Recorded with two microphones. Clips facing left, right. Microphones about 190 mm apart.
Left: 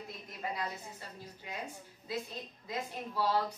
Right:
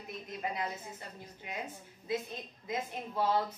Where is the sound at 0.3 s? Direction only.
20° right (ahead or behind).